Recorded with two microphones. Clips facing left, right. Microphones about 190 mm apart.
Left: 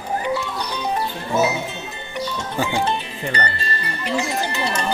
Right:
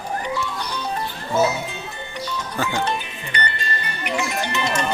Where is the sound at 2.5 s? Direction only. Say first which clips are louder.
Left 2 dB; 15° left (ahead or behind).